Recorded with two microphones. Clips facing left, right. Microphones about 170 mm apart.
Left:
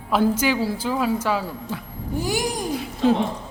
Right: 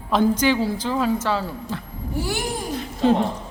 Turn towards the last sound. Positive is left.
turn(degrees=5)  # may be behind; listen again after turning